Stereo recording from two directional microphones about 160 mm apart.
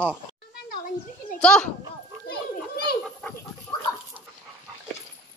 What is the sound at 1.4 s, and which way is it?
Speech, 5° left (ahead or behind).